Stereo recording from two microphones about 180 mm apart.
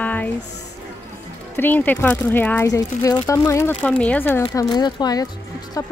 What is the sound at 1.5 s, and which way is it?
Speech, 10° left (ahead or behind).